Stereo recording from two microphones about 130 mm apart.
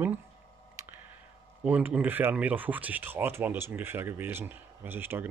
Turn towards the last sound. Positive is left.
turn(degrees=-15)  # may be behind; listen again after turning